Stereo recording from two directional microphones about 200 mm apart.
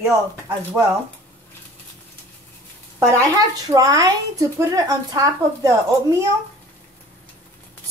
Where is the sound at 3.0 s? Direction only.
15° right (ahead or behind).